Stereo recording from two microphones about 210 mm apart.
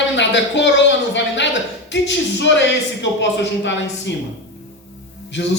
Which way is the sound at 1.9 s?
60° left (ahead or behind).